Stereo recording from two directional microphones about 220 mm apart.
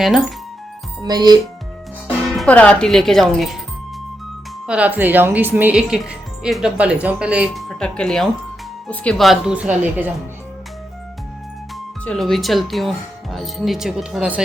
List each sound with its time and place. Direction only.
0.0 s speech: centre (ahead or behind)
1.0 s speech: 20° right (ahead or behind)
2.3 s speech: 5° left (ahead or behind)
4.6 s speech: 5° right (ahead or behind)
12.0 s speech: centre (ahead or behind)